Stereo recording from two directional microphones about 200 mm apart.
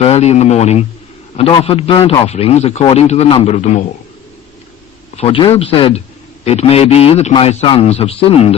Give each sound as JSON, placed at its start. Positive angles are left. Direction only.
{"t": 0.0, "sound": "a man's voice", "side_deg": 30}
{"t": 5.1, "sound": "a man's voice", "side_deg": 25}